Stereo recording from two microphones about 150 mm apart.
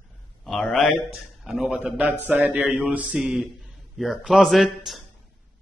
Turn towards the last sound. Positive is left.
turn(degrees=0)  # may be behind; listen again after turning